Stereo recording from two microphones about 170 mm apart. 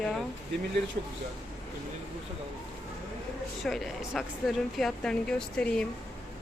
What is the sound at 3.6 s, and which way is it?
Speech, centre (ahead or behind).